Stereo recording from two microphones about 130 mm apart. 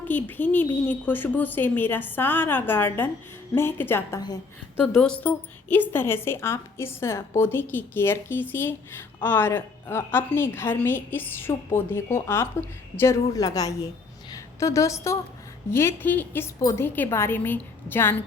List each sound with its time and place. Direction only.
0.0 s a woman's voice: 15° left (ahead or behind)